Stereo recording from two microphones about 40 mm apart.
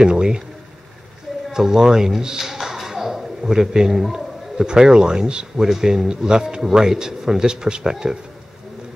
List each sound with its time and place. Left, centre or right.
0.0 s speech: right
1.5 s a man's voice: centre